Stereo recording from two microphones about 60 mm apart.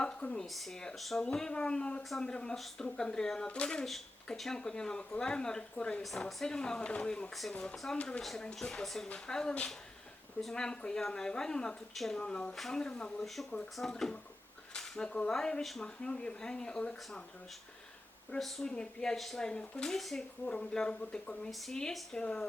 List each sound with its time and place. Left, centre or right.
0.0 s speech: centre
0.4 s speech: centre
1.2 s speech: centre
3.8 s speech: centre
6.0 s speech: centre
8.2 s speech: centre
13.2 s speech: centre
18.3 s speech: centre
18.6 s speech: centre
19.1 s speech: centre
20.4 s speech: centre